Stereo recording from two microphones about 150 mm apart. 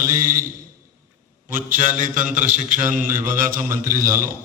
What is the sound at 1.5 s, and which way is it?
A man's voice, 60° right (ahead or behind).